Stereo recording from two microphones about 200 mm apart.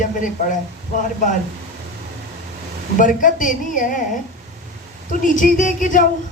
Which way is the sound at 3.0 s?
40° left (ahead or behind).